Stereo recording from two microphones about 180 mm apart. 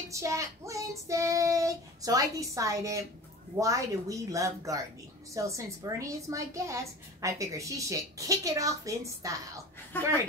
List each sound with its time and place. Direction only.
0.1 s a woman's voice: 15° right (ahead or behind)
9.9 s speech: 10° left (ahead or behind)